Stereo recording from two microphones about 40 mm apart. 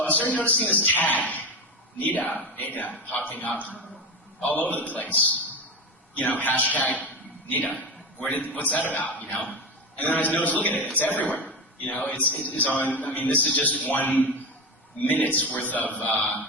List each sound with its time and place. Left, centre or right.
0.0 s a man's voice: left
11.4 s chop: left
12.3 s a man's voice: left